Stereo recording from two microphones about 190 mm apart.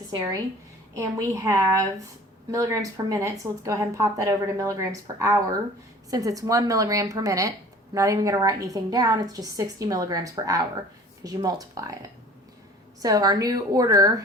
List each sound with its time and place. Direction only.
0.1 s speech: 15° right (ahead or behind)
1.5 s a woman's voice: 15° right (ahead or behind)
13.0 s a woman's voice: 20° right (ahead or behind)